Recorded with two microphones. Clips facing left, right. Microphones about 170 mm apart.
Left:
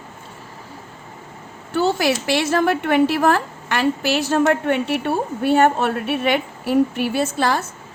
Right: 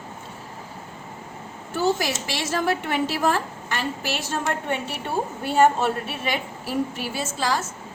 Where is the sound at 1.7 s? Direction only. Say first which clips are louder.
Left 5 dB; 65° left (ahead or behind).